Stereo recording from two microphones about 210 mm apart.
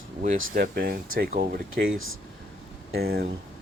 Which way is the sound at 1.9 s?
70° right (ahead or behind).